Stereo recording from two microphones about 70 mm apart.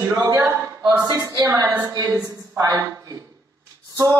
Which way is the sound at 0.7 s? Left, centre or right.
Right.